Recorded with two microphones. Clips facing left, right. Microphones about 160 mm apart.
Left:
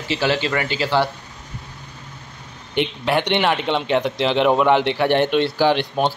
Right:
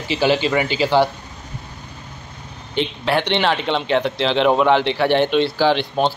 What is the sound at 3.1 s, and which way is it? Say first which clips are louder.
A man's voice: right 1 dB; 15° left (ahead or behind).